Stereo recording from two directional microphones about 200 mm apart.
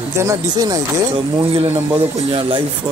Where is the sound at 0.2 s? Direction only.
15° right (ahead or behind).